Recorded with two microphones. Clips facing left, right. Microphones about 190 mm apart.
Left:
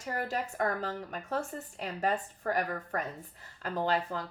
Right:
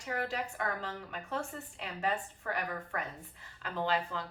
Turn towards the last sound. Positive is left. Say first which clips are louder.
# left 3 dB
turn(degrees=40)  # may be behind; listen again after turning